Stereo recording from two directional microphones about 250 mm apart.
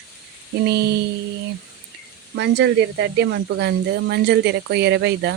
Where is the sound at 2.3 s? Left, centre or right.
Right.